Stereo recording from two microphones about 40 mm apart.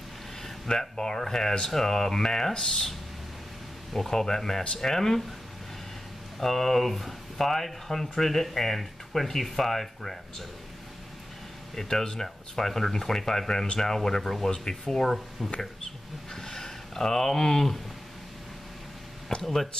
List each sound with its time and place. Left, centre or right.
0.4 s speech: centre
3.9 s speech: centre
6.4 s speech: centre
11.7 s speech: centre
16.3 s speech: centre
19.4 s speech: centre